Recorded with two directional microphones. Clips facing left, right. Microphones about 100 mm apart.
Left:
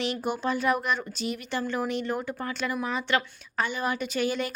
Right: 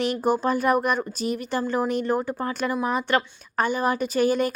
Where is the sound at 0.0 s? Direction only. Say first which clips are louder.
Right 6 dB; 45° right (ahead or behind).